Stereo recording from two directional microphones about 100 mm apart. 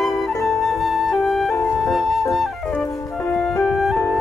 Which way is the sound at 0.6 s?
Centre (ahead or behind).